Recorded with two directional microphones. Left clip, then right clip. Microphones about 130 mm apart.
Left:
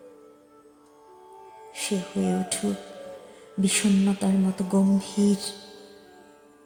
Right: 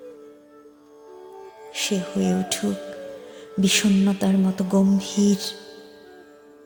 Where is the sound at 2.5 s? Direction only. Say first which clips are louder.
Right 4 dB; 60° right (ahead or behind).